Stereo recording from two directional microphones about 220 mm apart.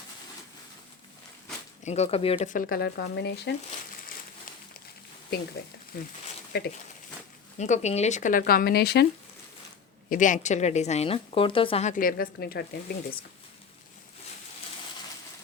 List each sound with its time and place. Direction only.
1.8 s a woman's voice: 30° left (ahead or behind); by 3.5 s 50° left (ahead or behind)
5.9 s speech: 45° left (ahead or behind)
7.6 s a woman's voice: 30° left (ahead or behind); by 9.0 s 45° left (ahead or behind)
10.1 s a woman's voice: 35° left (ahead or behind)